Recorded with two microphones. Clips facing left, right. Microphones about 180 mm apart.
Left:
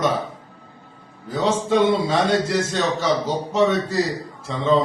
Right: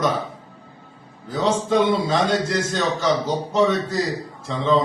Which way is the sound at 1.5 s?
5° left (ahead or behind).